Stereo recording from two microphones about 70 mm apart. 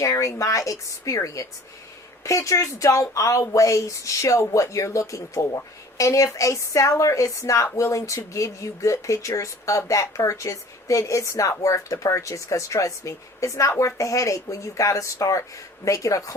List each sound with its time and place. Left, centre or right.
0.0 s speech: left